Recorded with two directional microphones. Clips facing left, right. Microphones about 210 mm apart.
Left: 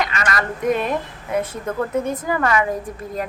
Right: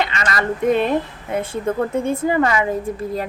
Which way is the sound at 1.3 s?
30° right (ahead or behind).